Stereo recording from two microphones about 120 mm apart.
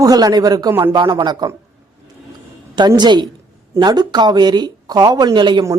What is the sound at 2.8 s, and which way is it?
Speech, 35° right (ahead or behind).